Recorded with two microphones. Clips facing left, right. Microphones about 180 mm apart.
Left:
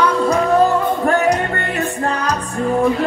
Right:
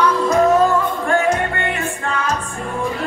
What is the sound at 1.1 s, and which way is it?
Music, 40° left (ahead or behind).